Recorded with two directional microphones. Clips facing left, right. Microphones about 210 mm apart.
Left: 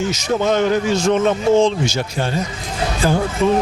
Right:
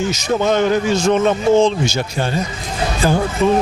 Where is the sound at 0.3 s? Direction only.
20° right (ahead or behind).